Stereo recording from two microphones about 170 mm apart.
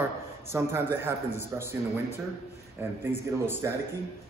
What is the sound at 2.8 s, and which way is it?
Speech, 15° right (ahead or behind).